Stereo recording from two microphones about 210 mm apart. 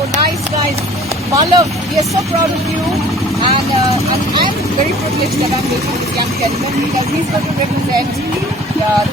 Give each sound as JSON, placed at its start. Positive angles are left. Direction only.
{"t": 1.3, "sound": "speech", "side_deg": -15}